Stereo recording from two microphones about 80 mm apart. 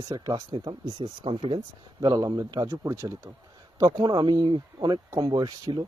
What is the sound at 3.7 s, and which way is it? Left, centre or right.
Speech, right.